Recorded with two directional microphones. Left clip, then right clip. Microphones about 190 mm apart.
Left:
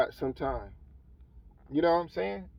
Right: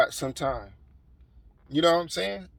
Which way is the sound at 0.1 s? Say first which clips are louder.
Right 3 dB; 20° right (ahead or behind).